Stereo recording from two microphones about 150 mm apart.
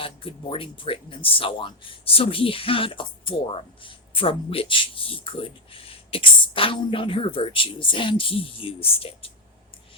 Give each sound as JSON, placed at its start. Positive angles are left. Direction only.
{"t": 0.0, "sound": "speech", "side_deg": 35}